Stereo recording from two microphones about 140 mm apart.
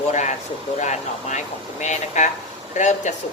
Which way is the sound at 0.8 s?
55° left (ahead or behind).